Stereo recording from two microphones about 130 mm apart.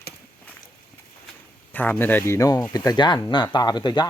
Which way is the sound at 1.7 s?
15° left (ahead or behind).